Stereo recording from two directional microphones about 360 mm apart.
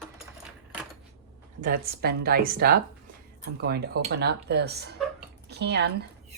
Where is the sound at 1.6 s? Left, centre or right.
Right.